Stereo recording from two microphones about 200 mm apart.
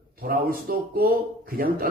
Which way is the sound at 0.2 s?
50° right (ahead or behind).